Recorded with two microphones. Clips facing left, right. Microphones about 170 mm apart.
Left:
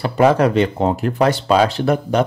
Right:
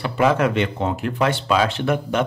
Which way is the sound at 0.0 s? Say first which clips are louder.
Left 4 dB; 35° left (ahead or behind).